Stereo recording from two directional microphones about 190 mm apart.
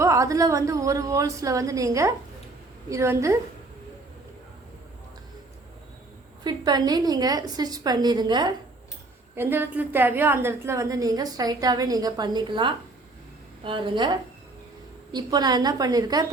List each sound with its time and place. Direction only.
0.0 s a woman's voice: 15° right (ahead or behind)
6.4 s a woman's voice: 20° right (ahead or behind)
9.3 s a woman's voice: 10° right (ahead or behind)